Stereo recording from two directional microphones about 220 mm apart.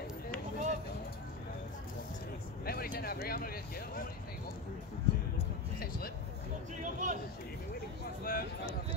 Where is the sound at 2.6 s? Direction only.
45° left (ahead or behind).